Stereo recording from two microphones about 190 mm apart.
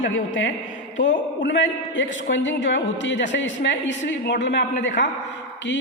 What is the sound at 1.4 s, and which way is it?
A woman's voice, 75° left (ahead or behind).